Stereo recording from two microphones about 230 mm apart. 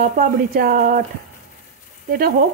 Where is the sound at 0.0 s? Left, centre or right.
Right.